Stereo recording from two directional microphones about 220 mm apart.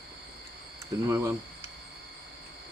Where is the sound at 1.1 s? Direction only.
15° right (ahead or behind).